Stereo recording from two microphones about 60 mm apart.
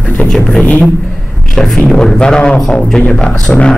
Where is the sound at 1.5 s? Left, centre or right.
Centre.